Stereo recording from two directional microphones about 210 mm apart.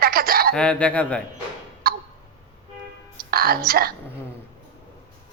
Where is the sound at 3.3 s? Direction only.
45° right (ahead or behind).